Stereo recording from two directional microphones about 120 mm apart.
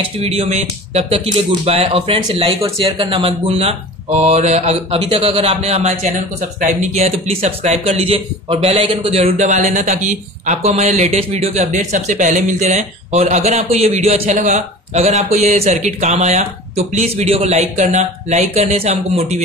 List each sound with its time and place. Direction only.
0.2 s a man's voice: 65° right (ahead or behind)
4.9 s a man's voice: 50° right (ahead or behind)